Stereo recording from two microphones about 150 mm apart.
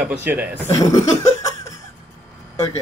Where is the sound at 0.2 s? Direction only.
15° right (ahead or behind).